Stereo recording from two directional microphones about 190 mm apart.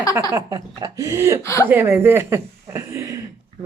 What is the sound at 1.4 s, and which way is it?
Speech, 15° left (ahead or behind).